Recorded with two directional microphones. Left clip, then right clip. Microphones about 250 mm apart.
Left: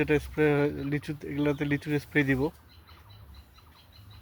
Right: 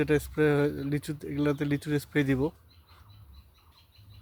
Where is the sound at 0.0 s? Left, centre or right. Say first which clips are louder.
Even; centre.